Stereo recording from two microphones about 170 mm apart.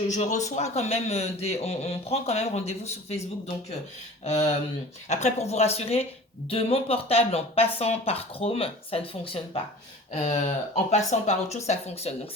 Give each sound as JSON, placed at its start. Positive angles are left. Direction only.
{"t": 0.1, "sound": "a man's voice", "side_deg": 45}